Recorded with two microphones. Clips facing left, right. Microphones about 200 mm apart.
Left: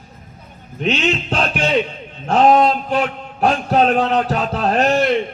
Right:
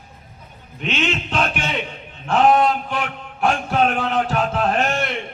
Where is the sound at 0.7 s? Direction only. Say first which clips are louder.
Left 5 dB; 40° left (ahead or behind).